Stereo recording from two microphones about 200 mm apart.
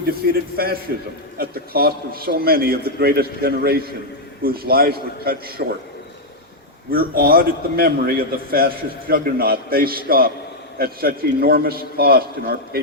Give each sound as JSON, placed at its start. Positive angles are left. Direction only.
{"t": 0.0, "sound": "a man's voice", "side_deg": -50}
{"t": 6.9, "sound": "a man's voice", "side_deg": -45}